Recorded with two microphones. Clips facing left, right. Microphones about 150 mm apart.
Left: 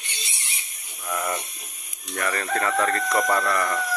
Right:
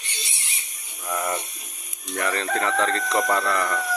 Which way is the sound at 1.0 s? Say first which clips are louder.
Right 1 dB; 15° right (ahead or behind).